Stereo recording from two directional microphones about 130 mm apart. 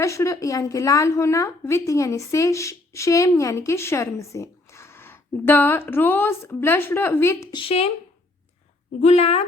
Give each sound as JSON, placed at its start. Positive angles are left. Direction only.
{"t": 0.0, "sound": "a woman's voice", "side_deg": 25}
{"t": 7.5, "sound": "speech", "side_deg": 45}
{"t": 9.0, "sound": "speech", "side_deg": 55}